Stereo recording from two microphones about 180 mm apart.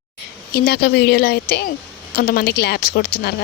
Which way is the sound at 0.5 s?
60° left (ahead or behind).